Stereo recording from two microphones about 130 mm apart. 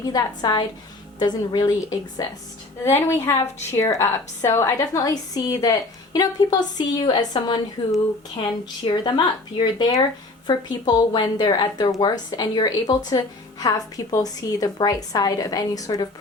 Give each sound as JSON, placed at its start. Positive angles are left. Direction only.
{"t": 0.0, "sound": "a woman's voice", "side_deg": 30}